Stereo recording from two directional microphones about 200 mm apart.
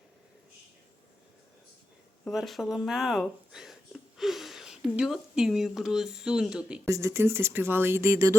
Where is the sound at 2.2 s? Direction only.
Centre (ahead or behind).